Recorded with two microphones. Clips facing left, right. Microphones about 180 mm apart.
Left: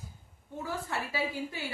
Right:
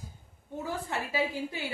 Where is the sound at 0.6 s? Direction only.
20° right (ahead or behind).